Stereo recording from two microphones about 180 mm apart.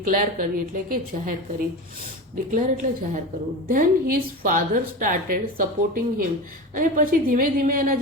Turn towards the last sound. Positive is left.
turn(degrees=-50)  # may be behind; listen again after turning